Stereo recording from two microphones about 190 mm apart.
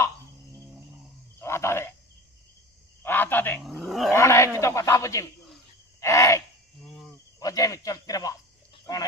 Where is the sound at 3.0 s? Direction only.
10° left (ahead or behind).